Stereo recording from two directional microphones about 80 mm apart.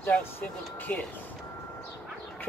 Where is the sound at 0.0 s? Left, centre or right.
Left.